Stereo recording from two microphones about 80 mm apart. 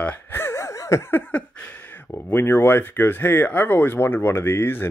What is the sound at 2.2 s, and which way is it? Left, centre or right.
Speech, left.